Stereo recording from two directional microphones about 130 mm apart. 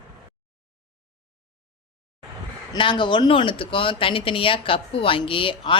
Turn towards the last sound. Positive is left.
turn(degrees=40)  # may be behind; listen again after turning